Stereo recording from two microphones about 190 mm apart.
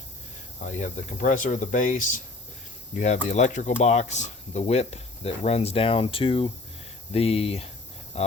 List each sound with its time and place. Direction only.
0.7 s speech: 40° left (ahead or behind)
3.2 s speech: 40° left (ahead or behind)